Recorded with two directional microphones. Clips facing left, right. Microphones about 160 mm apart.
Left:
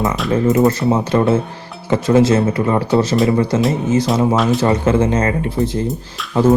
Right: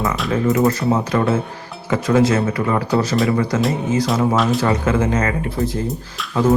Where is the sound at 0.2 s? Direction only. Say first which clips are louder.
Left 4 dB; centre (ahead or behind).